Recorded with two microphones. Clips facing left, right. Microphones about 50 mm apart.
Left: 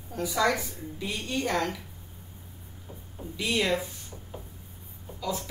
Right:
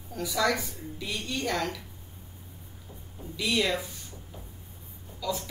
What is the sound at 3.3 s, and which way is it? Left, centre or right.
Speech, left.